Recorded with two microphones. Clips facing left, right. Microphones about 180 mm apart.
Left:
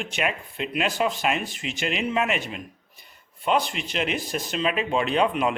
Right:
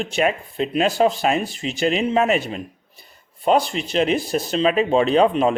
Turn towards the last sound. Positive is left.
turn(degrees=-35)  # may be behind; listen again after turning